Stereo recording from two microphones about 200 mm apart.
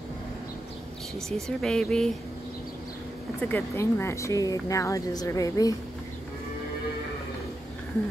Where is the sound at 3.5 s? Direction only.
10° left (ahead or behind).